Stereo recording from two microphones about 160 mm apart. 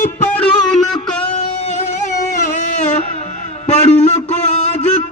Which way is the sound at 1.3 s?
40° left (ahead or behind).